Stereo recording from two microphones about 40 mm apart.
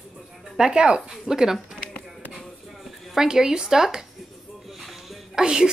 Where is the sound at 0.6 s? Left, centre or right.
Right.